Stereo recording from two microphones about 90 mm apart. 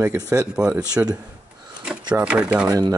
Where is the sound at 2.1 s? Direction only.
10° right (ahead or behind).